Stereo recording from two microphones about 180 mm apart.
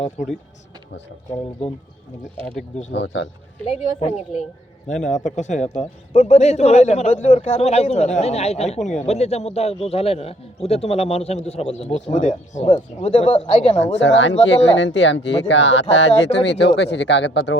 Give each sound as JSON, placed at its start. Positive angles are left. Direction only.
{"t": 0.2, "sound": "speech", "side_deg": 45}
{"t": 2.9, "sound": "speech", "side_deg": 85}
{"t": 3.7, "sound": "a man's voice", "side_deg": 40}
{"t": 12.6, "sound": "a man's voice", "side_deg": 25}
{"t": 14.0, "sound": "speech", "side_deg": 90}